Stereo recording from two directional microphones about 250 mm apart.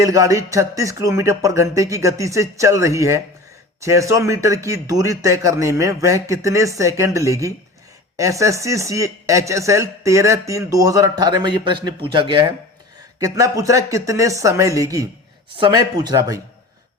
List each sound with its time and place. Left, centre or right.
0.0 s speech: centre